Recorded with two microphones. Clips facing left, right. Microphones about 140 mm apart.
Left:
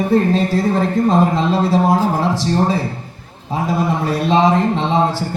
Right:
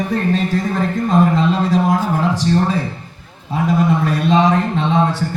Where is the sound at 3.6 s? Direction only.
35° left (ahead or behind).